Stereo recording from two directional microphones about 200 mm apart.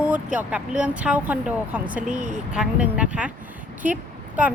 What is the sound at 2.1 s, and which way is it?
Speech, 40° right (ahead or behind).